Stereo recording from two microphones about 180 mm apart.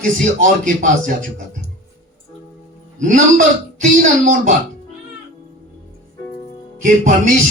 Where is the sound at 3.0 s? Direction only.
45° right (ahead or behind).